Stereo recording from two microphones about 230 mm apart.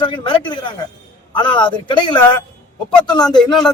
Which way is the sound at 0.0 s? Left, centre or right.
Left.